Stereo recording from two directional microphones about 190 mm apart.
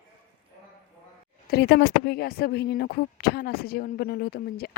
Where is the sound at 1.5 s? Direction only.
60° left (ahead or behind).